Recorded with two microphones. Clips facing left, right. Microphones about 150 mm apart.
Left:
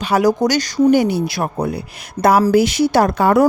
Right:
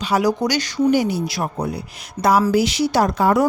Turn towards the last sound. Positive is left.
turn(degrees=60)  # may be behind; listen again after turning